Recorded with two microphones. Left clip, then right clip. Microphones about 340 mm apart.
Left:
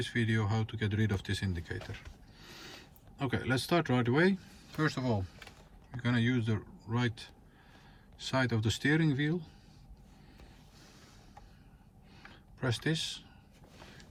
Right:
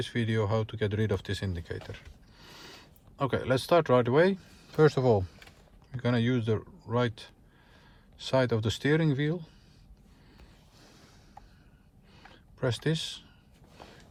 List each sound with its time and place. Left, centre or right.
0.0 s speech: centre
4.8 s a man's voice: centre
6.0 s a man's voice: centre
12.3 s speech: centre